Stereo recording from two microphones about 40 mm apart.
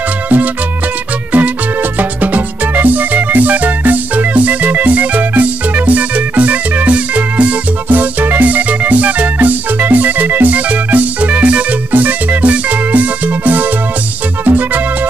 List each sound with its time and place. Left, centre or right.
1.3 s music: right
7.9 s music: right
11.9 s music: right